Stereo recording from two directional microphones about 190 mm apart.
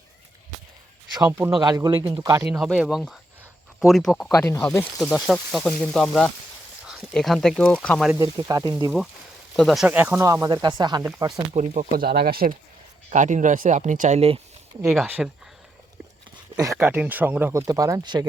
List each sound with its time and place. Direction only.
1.3 s speech: 15° right (ahead or behind)
2.5 s speech: centre (ahead or behind)
4.3 s speech: 15° left (ahead or behind)
4.9 s speech: centre (ahead or behind)
8.1 s speech: 20° right (ahead or behind)
9.6 s speech: centre (ahead or behind); by 11.3 s 20° right (ahead or behind)
11.5 s speech: 40° right (ahead or behind)
12.0 s speech: 55° right (ahead or behind)
13.1 s speech: 40° right (ahead or behind)
14.2 s speech: 30° right (ahead or behind)
14.8 s speech: 5° right (ahead or behind)
16.7 s speech: 10° right (ahead or behind)